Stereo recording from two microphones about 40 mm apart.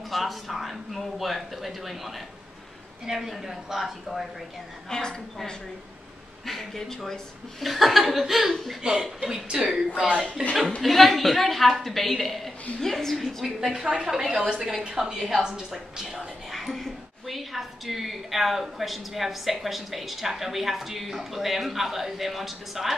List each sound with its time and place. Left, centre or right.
0.1 s a woman's voice: centre
4.8 s a woman's voice: centre
6.4 s a woman's voice: centre
7.6 s a woman's voice: centre
8.8 s a woman's voice: centre
10.8 s a woman's voice: centre
13.2 s a woman's voice: centre
16.5 s a woman's voice: centre